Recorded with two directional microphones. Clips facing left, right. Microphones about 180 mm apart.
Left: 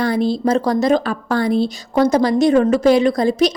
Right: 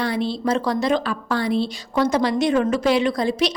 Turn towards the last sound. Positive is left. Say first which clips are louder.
# left 5 dB
turn(degrees=45)  # may be behind; listen again after turning